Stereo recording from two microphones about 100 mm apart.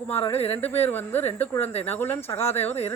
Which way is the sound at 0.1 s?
20° left (ahead or behind).